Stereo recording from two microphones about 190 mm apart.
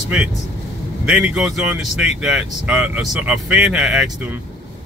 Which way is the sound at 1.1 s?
5° right (ahead or behind).